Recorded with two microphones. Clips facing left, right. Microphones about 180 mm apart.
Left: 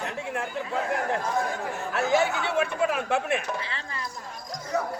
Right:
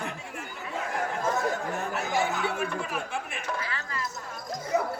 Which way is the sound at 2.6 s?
80° left.